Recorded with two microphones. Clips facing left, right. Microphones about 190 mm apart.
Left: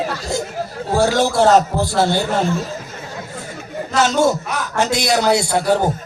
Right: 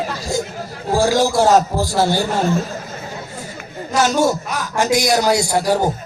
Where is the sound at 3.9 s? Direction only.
10° right (ahead or behind).